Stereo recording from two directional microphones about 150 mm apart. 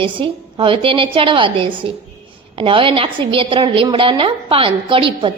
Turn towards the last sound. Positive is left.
turn(degrees=-35)  # may be behind; listen again after turning